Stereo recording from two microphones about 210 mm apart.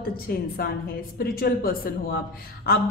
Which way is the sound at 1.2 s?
45° left (ahead or behind).